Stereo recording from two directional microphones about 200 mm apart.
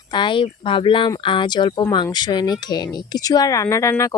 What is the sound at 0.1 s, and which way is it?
Speech, 25° left (ahead or behind).